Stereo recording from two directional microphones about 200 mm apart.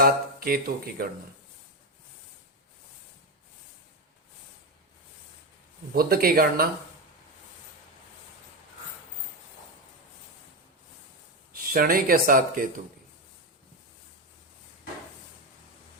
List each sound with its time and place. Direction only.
0.0 s speech: 45° right (ahead or behind)
5.9 s speech: 50° right (ahead or behind)
11.7 s speech: 45° right (ahead or behind)